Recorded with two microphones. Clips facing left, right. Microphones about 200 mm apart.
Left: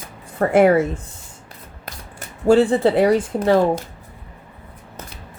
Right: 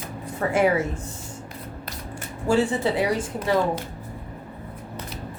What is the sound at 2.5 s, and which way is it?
Speech, 60° left (ahead or behind).